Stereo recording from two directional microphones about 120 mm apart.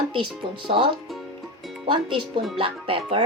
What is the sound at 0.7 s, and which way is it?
Speech, 45° right (ahead or behind).